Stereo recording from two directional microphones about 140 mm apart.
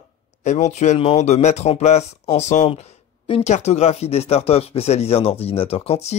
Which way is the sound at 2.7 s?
45° left (ahead or behind).